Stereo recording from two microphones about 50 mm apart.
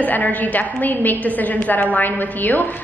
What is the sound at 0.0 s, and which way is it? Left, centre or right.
A woman's voice, left.